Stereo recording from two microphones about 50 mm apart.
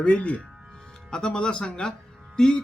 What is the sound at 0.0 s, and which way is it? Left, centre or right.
A man's voice, left.